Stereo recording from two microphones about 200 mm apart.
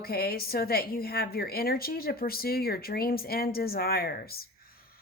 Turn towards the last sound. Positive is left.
turn(degrees=50)  # may be behind; listen again after turning